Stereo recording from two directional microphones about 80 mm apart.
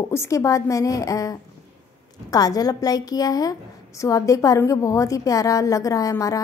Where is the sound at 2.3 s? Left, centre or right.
Left.